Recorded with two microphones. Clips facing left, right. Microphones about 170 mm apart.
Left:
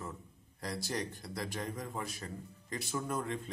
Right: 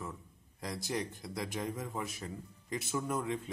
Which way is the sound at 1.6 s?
5° right (ahead or behind).